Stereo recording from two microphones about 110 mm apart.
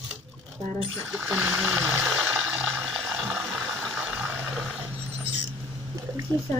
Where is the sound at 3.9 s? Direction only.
10° right (ahead or behind).